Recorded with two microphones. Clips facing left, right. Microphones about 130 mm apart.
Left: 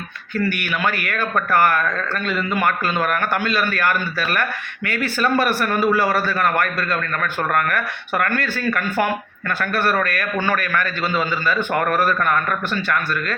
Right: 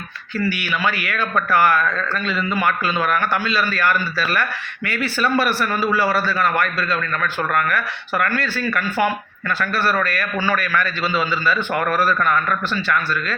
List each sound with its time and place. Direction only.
0.4 s a man's voice: 50° left (ahead or behind)